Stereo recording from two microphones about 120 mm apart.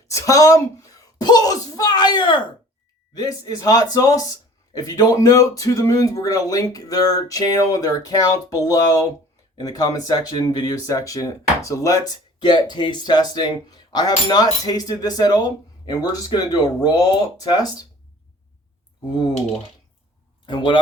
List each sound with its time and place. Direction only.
0.1 s speech: 25° left (ahead or behind)
20.4 s speech: 40° left (ahead or behind)